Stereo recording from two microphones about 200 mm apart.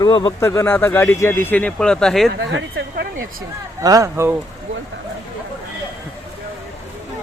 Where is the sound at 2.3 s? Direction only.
65° right (ahead or behind).